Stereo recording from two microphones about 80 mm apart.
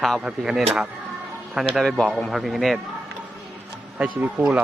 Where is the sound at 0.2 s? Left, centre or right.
Centre.